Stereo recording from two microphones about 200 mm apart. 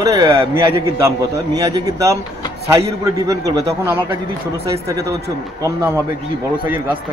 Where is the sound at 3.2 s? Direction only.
15° right (ahead or behind).